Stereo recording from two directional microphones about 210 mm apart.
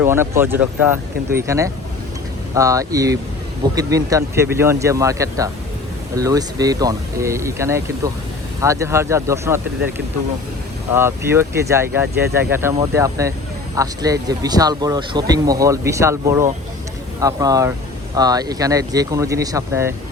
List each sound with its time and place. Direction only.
0.0 s speech: 10° right (ahead or behind)
10.9 s speech: 10° right (ahead or behind)